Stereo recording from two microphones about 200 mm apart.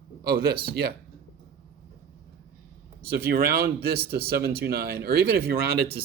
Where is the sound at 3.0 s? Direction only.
50° right (ahead or behind).